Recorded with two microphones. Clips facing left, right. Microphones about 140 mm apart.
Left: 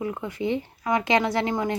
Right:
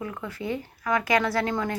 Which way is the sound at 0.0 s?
20° left (ahead or behind).